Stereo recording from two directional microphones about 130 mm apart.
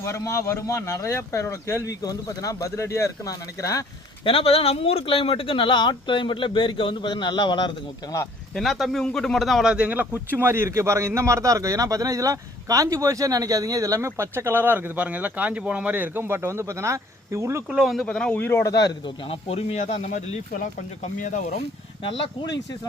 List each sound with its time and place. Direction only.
0.0 s speech: 25° left (ahead or behind)
4.2 s speech: 45° left (ahead or behind)
8.5 s speech: centre (ahead or behind); by 17.6 s 20° right (ahead or behind)
17.7 s speech: 5° right (ahead or behind)
18.3 s speech: 15° left (ahead or behind)
18.7 s speech: 30° left (ahead or behind); by 21.4 s 75° left (ahead or behind)
22.0 s speech: 40° left (ahead or behind)